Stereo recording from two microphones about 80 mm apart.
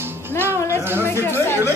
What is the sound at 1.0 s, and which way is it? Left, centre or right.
Speech, left.